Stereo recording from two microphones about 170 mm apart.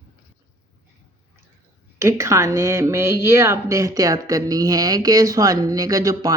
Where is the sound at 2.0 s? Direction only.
15° right (ahead or behind).